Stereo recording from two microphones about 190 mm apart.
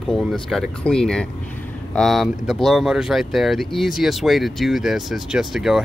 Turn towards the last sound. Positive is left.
turn(degrees=0)  # may be behind; listen again after turning